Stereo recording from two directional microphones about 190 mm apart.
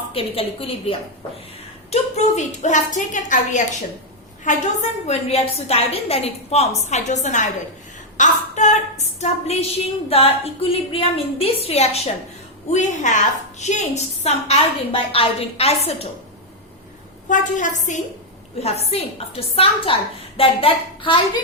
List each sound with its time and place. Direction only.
0.1 s a woman's voice: 30° left (ahead or behind)
17.2 s a woman's voice: 40° left (ahead or behind)